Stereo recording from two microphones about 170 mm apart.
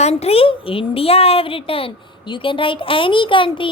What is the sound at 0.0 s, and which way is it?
Speech, 35° left (ahead or behind).